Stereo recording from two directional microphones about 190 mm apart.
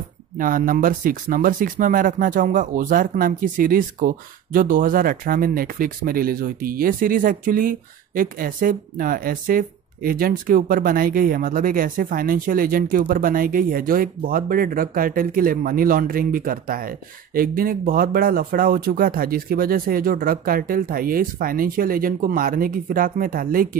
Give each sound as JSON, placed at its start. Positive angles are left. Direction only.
{"t": 0.4, "sound": "speech", "side_deg": -45}